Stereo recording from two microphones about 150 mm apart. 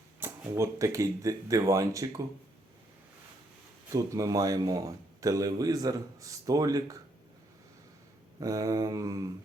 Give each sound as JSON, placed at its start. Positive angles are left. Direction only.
{"t": 0.2, "sound": "speech", "side_deg": -20}
{"t": 3.9, "sound": "speech", "side_deg": -20}
{"t": 8.4, "sound": "speech", "side_deg": -20}